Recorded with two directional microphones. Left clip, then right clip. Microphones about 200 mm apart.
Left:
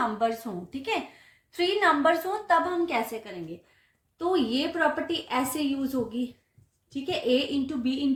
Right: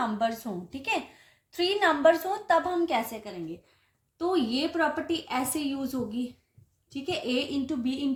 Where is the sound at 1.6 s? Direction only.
40° right (ahead or behind).